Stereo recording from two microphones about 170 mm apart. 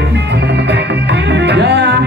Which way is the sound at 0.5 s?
90° right.